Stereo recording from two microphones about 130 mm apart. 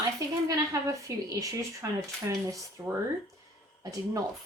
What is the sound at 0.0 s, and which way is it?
A woman's voice, 25° right (ahead or behind).